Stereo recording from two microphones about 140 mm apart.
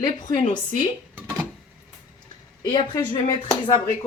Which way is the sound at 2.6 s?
30° left (ahead or behind).